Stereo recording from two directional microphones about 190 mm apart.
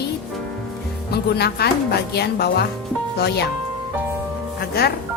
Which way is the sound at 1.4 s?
60° left (ahead or behind).